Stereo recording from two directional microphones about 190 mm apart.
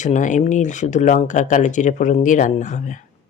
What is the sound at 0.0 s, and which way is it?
Speech, 40° left (ahead or behind).